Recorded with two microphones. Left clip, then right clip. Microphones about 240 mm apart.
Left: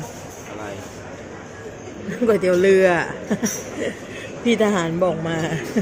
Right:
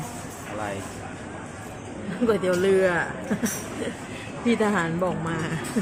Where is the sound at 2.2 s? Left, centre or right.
Left.